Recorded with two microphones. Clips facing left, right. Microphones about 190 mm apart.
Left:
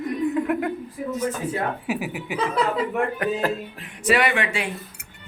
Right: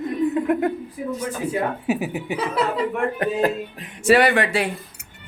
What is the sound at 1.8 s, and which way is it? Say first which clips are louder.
Speech: right 4 dB; 25° right (ahead or behind).